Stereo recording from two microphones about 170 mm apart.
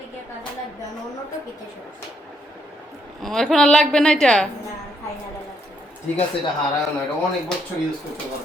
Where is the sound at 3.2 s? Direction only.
Centre (ahead or behind).